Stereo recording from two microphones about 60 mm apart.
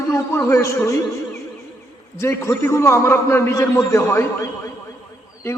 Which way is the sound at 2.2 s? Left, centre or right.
Left.